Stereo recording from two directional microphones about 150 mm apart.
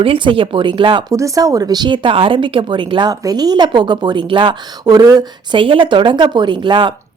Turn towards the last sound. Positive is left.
turn(degrees=-30)  # may be behind; listen again after turning